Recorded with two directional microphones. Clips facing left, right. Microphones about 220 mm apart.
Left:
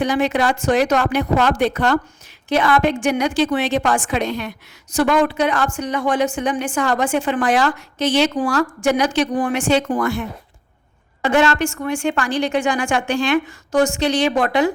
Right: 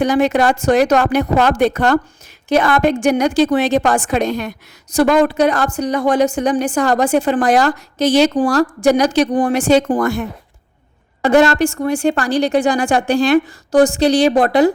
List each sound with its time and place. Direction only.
0.0 s a woman's voice: 45° right (ahead or behind)